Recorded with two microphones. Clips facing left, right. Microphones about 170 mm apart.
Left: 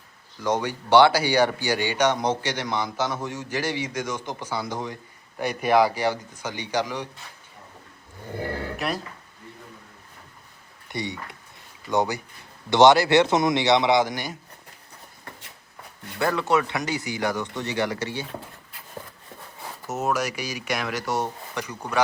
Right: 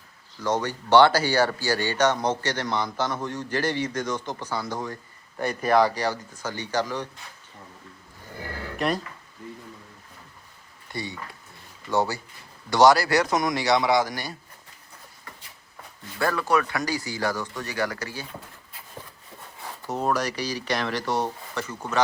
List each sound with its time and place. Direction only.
0.4 s speech: 10° left (ahead or behind)
6.1 s speech: 15° left (ahead or behind)
8.7 s a sound: 5° left (ahead or behind)
10.9 s speech: 20° left (ahead or behind)
16.1 s speech: 20° left (ahead or behind)
19.9 s speech: 5° left (ahead or behind)